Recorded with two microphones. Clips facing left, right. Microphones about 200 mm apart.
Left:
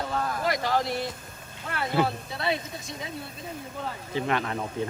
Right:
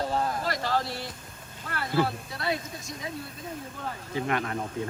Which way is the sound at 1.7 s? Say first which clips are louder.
Left 2 dB; 20° left (ahead or behind).